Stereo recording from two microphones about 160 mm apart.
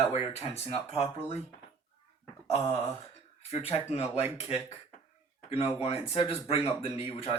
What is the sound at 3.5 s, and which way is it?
Speech, 40° left (ahead or behind).